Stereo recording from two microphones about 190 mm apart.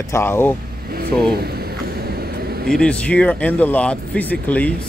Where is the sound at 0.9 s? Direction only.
55° right (ahead or behind).